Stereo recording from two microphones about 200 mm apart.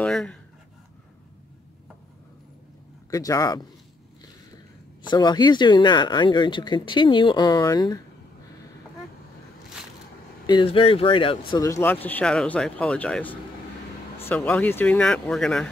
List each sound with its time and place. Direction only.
0.0 s speech: 5° left (ahead or behind)
3.1 s speech: 15° left (ahead or behind)
5.0 s speech: 20° left (ahead or behind)
10.4 s speech: 25° left (ahead or behind); by 15.7 s 5° left (ahead or behind)